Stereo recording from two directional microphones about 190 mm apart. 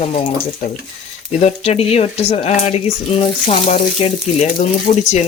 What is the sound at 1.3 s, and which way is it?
Speech, 35° left (ahead or behind).